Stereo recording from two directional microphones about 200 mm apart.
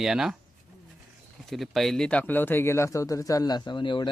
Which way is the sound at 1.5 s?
Centre (ahead or behind).